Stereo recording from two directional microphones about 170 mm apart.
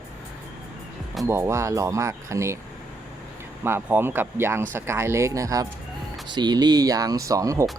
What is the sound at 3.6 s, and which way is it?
Speech, 15° right (ahead or behind).